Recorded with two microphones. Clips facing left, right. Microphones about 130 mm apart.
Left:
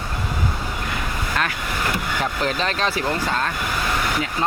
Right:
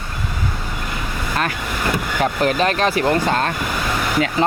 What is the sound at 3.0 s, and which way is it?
Speech, 20° right (ahead or behind).